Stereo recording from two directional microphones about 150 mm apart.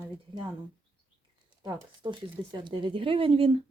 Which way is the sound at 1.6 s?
30° right (ahead or behind).